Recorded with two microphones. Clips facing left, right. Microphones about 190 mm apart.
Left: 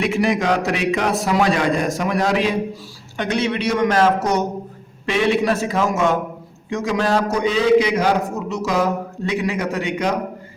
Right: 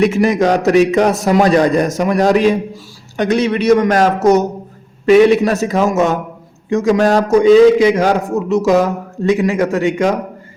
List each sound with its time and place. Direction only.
0.0 s a man's voice: 45° right (ahead or behind)